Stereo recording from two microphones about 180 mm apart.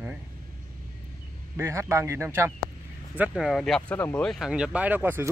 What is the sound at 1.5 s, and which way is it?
Speech, 15° right (ahead or behind).